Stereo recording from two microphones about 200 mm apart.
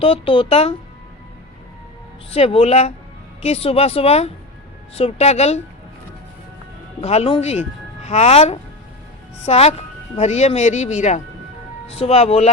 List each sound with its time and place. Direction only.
0.0 s speech: 25° left (ahead or behind)
2.3 s speech: 30° left (ahead or behind)
7.0 s speech: 30° left (ahead or behind)